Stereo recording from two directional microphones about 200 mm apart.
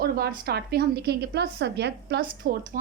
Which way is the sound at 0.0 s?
50° right (ahead or behind).